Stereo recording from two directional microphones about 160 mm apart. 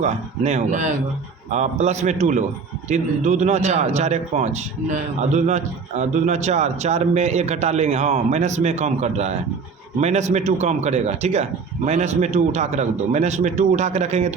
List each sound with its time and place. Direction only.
0.0 s a man's voice: 45° right (ahead or behind)